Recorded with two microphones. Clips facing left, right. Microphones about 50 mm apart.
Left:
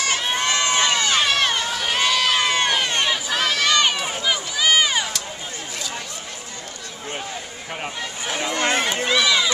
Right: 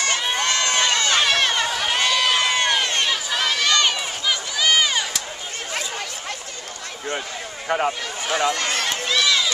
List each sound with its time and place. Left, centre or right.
0.0 s crowd: centre
0.4 s run: centre
3.3 s a sound: centre
3.7 s run: centre
7.1 s a sound: right
8.3 s speech: right
8.5 s speech: left